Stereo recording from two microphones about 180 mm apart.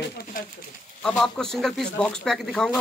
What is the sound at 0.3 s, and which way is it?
Speech, 50° left (ahead or behind).